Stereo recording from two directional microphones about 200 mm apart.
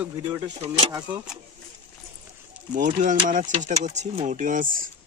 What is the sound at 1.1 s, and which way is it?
Speech, 5° right (ahead or behind).